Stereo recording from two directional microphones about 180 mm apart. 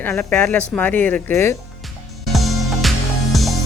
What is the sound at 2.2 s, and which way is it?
Music, centre (ahead or behind).